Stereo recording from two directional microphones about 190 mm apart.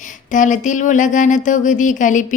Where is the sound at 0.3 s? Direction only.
40° left (ahead or behind).